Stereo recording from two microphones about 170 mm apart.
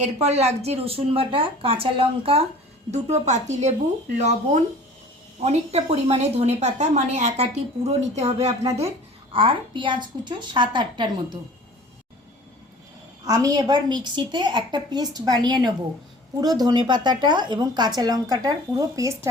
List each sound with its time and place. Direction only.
0.0 s a woman's voice: 40° right (ahead or behind)
13.2 s a woman's voice: 20° right (ahead or behind)